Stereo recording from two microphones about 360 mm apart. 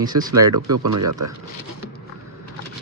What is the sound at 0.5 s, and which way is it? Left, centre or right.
Speech, right.